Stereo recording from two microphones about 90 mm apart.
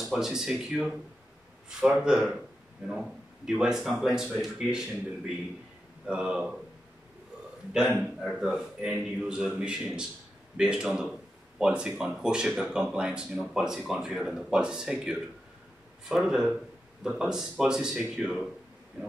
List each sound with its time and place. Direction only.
0.0 s a man's voice: 5° right (ahead or behind)
2.0 s a man's voice: 10° right (ahead or behind)
8.2 s a man's voice: centre (ahead or behind)
19.0 s a sound: 15° right (ahead or behind)